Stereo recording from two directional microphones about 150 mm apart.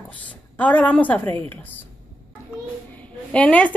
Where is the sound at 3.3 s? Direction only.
10° left (ahead or behind).